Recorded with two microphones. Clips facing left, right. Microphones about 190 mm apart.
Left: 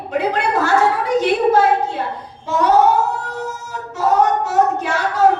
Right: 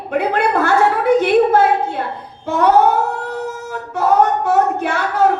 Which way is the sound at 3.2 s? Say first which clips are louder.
Right 3 dB; 60° right (ahead or behind).